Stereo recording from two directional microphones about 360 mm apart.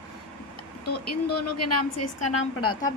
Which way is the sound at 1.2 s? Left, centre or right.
Left.